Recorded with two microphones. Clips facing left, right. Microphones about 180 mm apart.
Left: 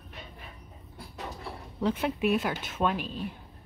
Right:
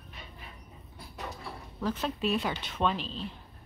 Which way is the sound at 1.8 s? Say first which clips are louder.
Left 4 dB; 15° left (ahead or behind).